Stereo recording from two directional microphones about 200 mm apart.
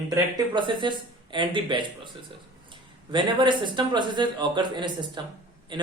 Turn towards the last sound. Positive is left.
turn(degrees=-25)  # may be behind; listen again after turning